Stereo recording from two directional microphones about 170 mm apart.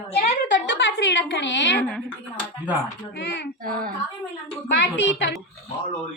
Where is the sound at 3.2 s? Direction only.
90° left.